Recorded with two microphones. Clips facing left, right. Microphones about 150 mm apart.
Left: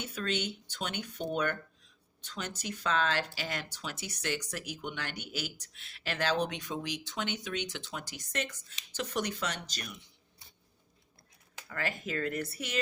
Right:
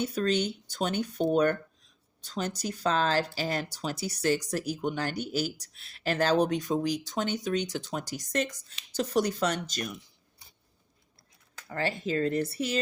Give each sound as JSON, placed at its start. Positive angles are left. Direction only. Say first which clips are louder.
{"t": 0.0, "sound": "speech", "louder": "right 7 dB", "side_deg": -40}
{"t": 11.7, "sound": "speech", "louder": "right 6 dB", "side_deg": -30}